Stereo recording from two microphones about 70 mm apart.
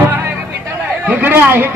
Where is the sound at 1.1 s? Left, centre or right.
Right.